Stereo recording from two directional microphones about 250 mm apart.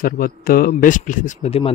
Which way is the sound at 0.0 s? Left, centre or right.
Left.